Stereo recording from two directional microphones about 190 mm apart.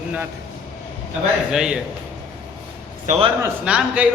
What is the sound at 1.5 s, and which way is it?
Speech, 5° right (ahead or behind).